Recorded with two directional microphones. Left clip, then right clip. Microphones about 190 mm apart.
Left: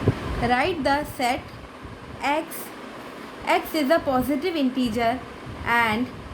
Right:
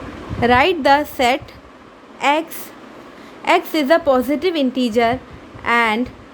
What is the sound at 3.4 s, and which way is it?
A woman's voice, 55° right (ahead or behind).